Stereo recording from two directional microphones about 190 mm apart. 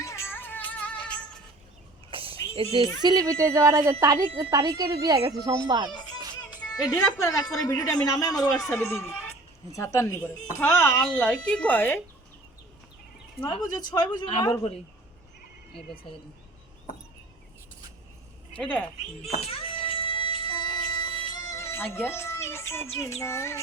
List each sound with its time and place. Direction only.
0.0 s music: 15° left (ahead or behind)
2.0 s a sound: 30° right (ahead or behind)
3.0 s a woman's voice: 20° right (ahead or behind)
5.9 s a child's voice: 20° left (ahead or behind)
13.4 s a woman's voice: 25° left (ahead or behind)
18.5 s speech: 5° left (ahead or behind)
19.3 s a sound: 30° left (ahead or behind); by 22.0 s 10° left (ahead or behind)
22.1 s speech: 15° left (ahead or behind)